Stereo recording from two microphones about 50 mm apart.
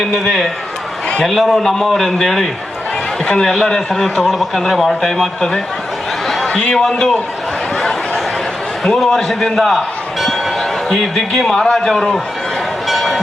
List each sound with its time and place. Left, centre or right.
0.0 s a man's voice: centre
3.2 s a man's voice: centre
6.2 s a sound: centre
6.6 s a man's voice: left
7.8 s a sound: centre
8.8 s speech: centre
12.9 s train: centre